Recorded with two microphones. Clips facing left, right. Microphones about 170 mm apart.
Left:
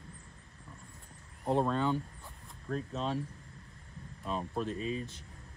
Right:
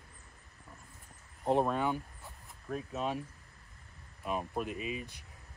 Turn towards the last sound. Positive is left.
turn(degrees=-15)  # may be behind; listen again after turning